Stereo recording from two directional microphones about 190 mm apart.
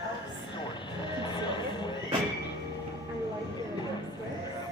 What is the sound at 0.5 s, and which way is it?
Music, 25° left (ahead or behind).